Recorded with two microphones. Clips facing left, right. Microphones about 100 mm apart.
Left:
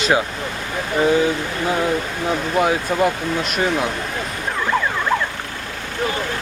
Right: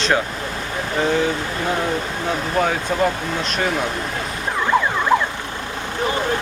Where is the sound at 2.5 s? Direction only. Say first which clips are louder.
Left 2 dB; 10° left (ahead or behind).